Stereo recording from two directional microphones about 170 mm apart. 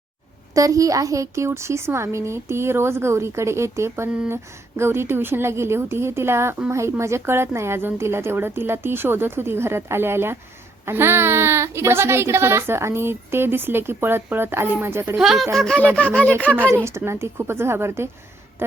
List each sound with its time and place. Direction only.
0.5 s a woman's voice: 20° right (ahead or behind)
15.2 s speech: centre (ahead or behind)
16.7 s a woman's voice: 15° right (ahead or behind)